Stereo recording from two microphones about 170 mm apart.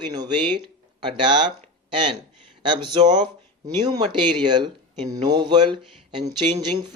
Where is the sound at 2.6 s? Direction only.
25° right (ahead or behind).